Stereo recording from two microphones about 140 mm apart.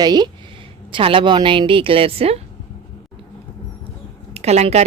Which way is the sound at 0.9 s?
40° right (ahead or behind).